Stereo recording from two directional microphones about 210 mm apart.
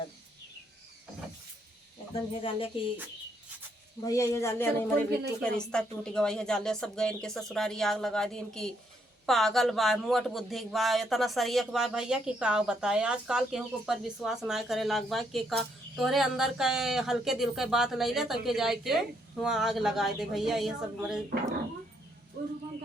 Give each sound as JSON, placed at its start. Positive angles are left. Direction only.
{"t": 2.3, "sound": "speech", "side_deg": 25}
{"t": 4.0, "sound": "speech", "side_deg": 15}